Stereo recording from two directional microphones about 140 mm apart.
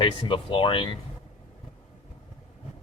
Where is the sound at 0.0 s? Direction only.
35° left (ahead or behind).